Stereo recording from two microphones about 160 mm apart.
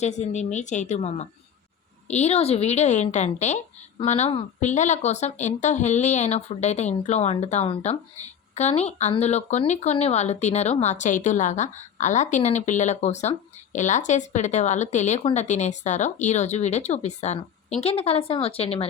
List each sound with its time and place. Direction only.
0.0 s speech: 45° left (ahead or behind)